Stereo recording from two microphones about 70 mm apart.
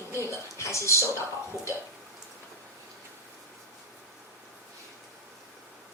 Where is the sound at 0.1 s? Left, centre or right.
Left.